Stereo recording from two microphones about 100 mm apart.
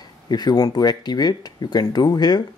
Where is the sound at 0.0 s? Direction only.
45° left (ahead or behind).